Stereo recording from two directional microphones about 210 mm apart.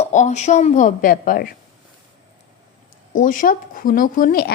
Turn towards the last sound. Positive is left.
turn(degrees=45)  # may be behind; listen again after turning